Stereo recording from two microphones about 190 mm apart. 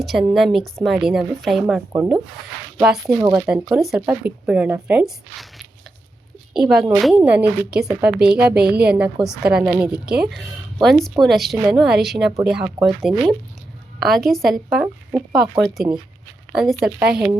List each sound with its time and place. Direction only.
0.0 s a woman's voice: centre (ahead or behind)
3.2 s speech: 15° right (ahead or behind)
3.5 s a woman's voice: centre (ahead or behind)